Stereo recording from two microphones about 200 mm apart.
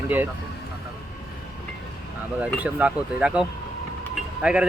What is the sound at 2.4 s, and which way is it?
Speech, 5° right (ahead or behind).